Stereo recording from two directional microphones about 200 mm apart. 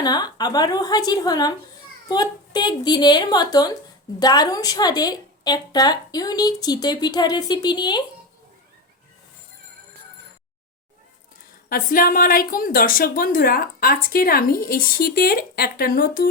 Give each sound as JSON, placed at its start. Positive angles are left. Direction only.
{"t": 0.0, "sound": "a woman's voice", "side_deg": 20}
{"t": 11.7, "sound": "a woman's voice", "side_deg": 45}